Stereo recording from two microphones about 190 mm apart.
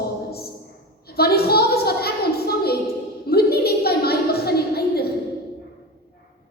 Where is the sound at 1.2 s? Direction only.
55° left (ahead or behind).